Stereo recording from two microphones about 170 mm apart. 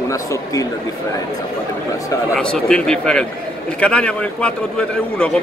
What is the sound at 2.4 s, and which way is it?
A man's voice, 5° left (ahead or behind).